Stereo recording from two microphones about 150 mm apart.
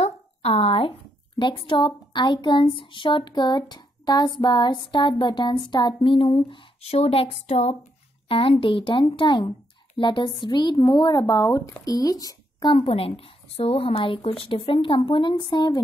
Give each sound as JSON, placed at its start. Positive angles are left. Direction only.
{"t": 0.0, "sound": "a sound", "side_deg": 45}
{"t": 1.4, "sound": "speech", "side_deg": 35}
{"t": 12.7, "sound": "speech", "side_deg": 40}